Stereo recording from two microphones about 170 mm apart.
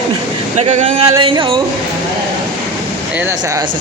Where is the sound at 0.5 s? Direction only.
40° right (ahead or behind).